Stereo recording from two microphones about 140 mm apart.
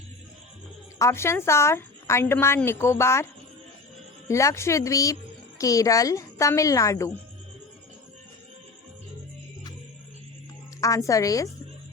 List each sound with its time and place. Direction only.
0.9 s a woman's voice: 20° left (ahead or behind)
4.3 s a woman's voice: 20° left (ahead or behind)
10.8 s a woman's voice: 25° left (ahead or behind)